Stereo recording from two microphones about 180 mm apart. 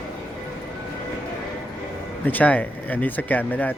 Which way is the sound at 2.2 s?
10° left (ahead or behind).